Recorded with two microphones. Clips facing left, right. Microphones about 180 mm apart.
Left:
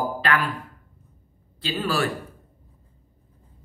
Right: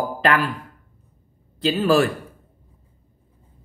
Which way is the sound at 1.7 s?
45° right (ahead or behind).